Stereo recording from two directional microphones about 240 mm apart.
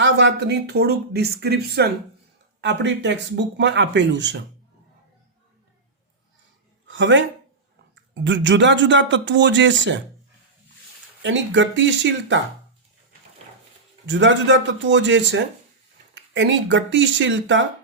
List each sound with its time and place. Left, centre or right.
0.0 s speech: right
6.8 s speech: right
11.2 s speech: right
14.1 s speech: right